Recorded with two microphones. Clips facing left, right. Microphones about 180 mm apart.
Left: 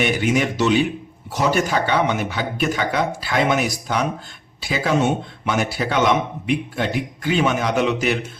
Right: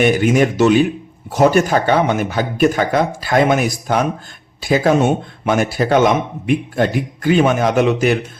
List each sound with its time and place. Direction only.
0.0 s speech: 45° right (ahead or behind)